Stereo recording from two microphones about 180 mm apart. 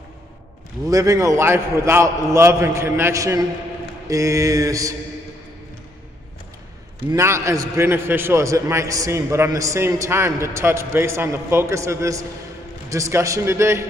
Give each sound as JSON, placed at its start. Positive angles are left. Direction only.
{"t": 0.8, "sound": "a man's voice", "side_deg": -20}
{"t": 7.1, "sound": "a man's voice", "side_deg": -15}